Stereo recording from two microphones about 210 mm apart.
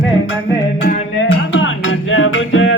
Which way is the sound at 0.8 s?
55° left (ahead or behind).